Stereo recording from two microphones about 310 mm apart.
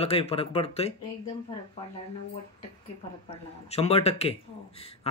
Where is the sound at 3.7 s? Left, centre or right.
Centre.